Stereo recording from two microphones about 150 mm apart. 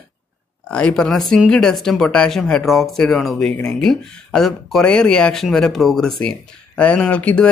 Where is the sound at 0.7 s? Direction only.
5° left (ahead or behind).